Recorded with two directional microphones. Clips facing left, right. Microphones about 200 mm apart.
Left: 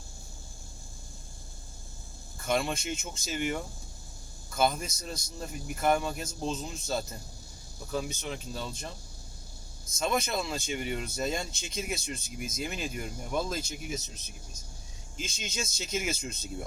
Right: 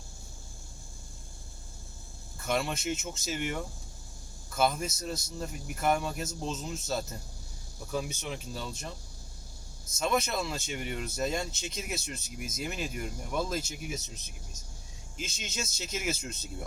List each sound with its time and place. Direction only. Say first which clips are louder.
2.5 s speech: left 1 dB; centre (ahead or behind)
10.0 s speech: even; 5° right (ahead or behind)
15.2 s speech: left 1 dB; 5° right (ahead or behind)